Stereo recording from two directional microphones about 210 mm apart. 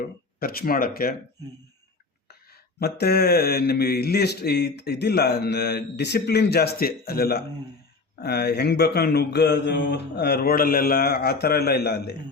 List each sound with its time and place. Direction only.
0.0 s speech: 45° left (ahead or behind)
2.7 s speech: 50° left (ahead or behind)